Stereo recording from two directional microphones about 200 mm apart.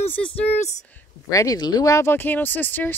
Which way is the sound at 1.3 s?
15° left (ahead or behind).